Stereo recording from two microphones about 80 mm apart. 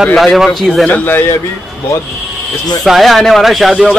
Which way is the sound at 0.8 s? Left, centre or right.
Left.